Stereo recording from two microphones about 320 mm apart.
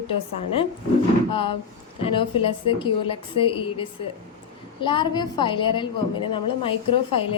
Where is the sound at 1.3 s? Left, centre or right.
Centre.